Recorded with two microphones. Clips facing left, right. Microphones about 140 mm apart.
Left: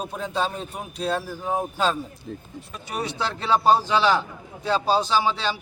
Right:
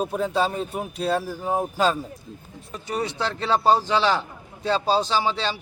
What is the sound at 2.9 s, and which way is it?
Speech, 10° left (ahead or behind).